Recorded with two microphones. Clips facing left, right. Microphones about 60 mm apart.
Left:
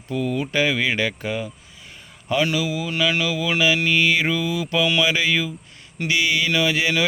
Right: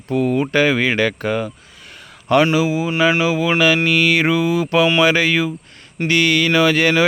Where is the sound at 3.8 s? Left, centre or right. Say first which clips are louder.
Right 4 dB; right.